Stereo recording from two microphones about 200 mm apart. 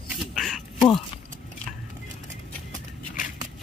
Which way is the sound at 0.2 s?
Centre (ahead or behind).